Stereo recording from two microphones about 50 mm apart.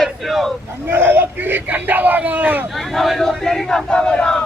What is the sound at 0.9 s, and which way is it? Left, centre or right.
Speech, right.